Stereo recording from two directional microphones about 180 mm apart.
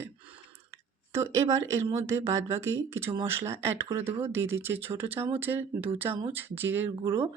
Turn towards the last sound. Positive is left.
turn(degrees=-15)  # may be behind; listen again after turning